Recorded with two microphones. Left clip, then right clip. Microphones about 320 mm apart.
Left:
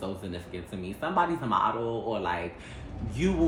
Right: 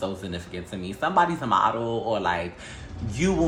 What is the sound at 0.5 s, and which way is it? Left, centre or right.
Speech, right.